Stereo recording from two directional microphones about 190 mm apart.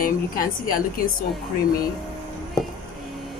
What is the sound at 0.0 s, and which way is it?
Speech, 50° left (ahead or behind).